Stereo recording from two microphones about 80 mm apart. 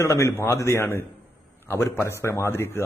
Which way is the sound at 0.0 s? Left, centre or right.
Left.